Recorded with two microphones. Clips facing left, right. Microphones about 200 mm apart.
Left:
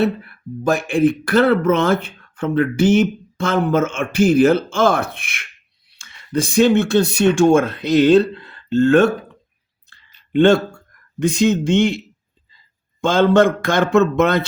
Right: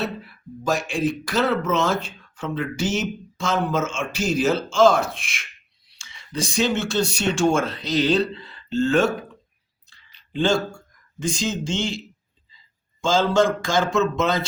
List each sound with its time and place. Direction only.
0.0 s speech: 60° left (ahead or behind)
10.1 s a sound: 60° left (ahead or behind)
11.2 s speech: 60° left (ahead or behind)